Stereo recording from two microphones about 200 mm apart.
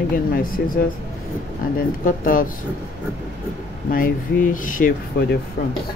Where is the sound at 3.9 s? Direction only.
45° left (ahead or behind).